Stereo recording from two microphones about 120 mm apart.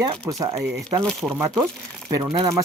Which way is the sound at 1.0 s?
5° left (ahead or behind).